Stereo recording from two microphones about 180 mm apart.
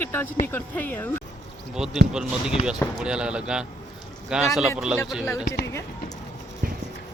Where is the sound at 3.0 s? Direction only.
5° right (ahead or behind).